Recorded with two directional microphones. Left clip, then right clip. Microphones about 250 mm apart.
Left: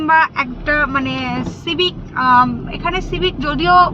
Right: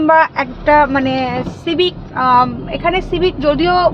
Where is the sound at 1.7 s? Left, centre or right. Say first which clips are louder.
Right 2 dB; centre.